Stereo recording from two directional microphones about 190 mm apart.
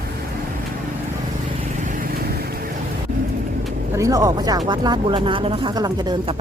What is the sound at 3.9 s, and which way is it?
Speech, 15° right (ahead or behind).